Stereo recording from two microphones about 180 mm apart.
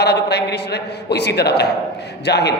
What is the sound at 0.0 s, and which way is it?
A man's voice, 65° left (ahead or behind).